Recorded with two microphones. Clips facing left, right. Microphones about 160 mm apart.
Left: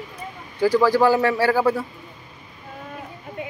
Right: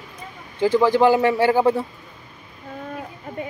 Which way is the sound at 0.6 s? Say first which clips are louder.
Right 1 dB; 20° right (ahead or behind).